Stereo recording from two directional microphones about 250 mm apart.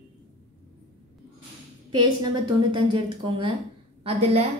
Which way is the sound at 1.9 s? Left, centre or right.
Centre.